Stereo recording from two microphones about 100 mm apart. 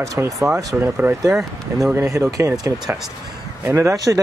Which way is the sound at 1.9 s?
30° right (ahead or behind).